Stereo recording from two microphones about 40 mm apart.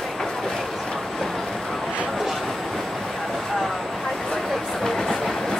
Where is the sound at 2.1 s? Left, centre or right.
Centre.